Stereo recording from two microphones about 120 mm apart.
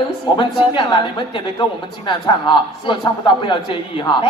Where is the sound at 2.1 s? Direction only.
45° left (ahead or behind).